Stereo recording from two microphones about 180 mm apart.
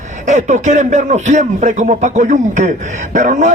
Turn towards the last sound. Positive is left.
turn(degrees=-40)  # may be behind; listen again after turning